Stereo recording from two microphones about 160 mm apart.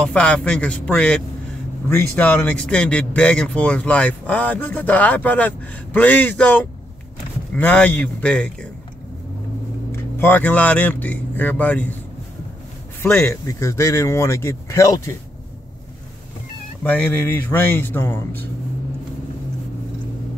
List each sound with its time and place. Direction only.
0.0 s speech: 5° left (ahead or behind)
10.1 s speech: 10° left (ahead or behind)
13.0 s speech: 15° left (ahead or behind)
16.8 s speech: 10° left (ahead or behind)